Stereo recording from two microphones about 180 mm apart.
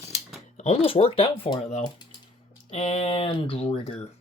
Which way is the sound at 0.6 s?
35° left (ahead or behind).